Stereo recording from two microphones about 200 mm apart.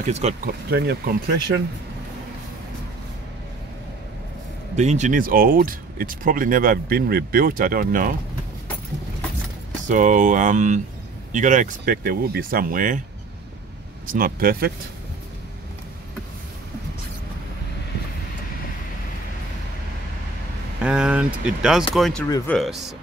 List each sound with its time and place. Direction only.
0.0 s speech: 35° right (ahead or behind)
0.5 s speech: 50° right (ahead or behind)
4.7 s speech: 35° right (ahead or behind)
9.8 s speech: 40° right (ahead or behind)
14.0 s speech: 45° right (ahead or behind)
20.8 s speech: 5° right (ahead or behind)